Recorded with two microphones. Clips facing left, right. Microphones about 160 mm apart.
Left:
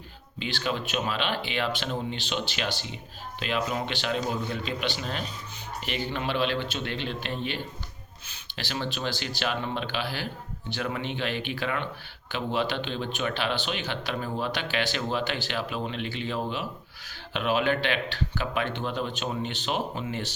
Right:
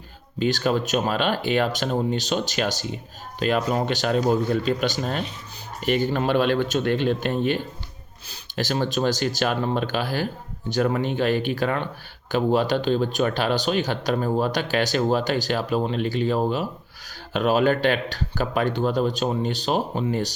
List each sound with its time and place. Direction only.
0.3 s speech: 45° right (ahead or behind)